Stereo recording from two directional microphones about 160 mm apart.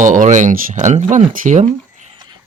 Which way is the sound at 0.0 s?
50° right (ahead or behind).